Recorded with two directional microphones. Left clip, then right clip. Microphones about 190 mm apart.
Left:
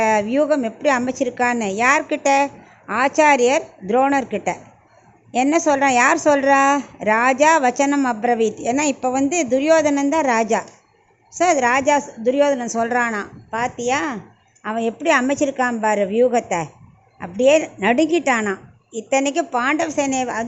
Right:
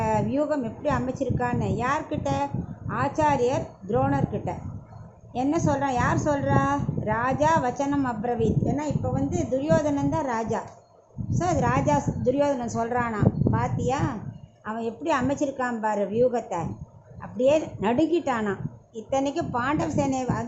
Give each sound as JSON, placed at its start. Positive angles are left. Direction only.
{"t": 0.0, "sound": "a woman's voice", "side_deg": 20}